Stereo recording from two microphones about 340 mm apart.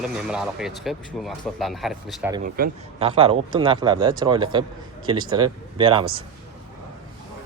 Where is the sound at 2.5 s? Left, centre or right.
Right.